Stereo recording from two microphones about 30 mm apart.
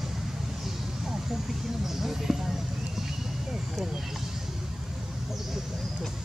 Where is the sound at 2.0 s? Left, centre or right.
Centre.